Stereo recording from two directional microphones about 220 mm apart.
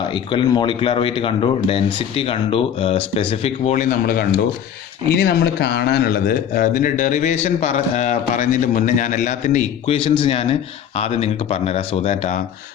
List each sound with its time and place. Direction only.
0.1 s a man's voice: 20° left (ahead or behind)